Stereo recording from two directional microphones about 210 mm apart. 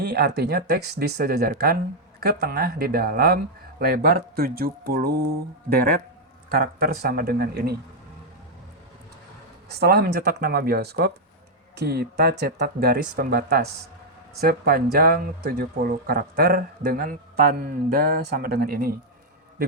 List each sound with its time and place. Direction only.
0.0 s speech: 50° right (ahead or behind)
9.6 s speech: 50° right (ahead or behind)